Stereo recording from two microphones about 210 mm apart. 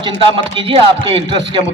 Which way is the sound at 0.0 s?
25° right (ahead or behind).